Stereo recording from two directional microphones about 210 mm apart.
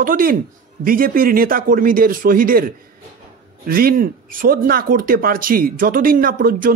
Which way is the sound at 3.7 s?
45° right (ahead or behind).